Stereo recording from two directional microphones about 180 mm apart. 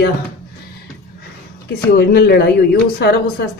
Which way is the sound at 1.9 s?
60° left (ahead or behind).